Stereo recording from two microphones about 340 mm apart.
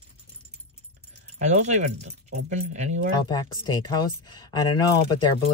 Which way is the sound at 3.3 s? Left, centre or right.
Centre.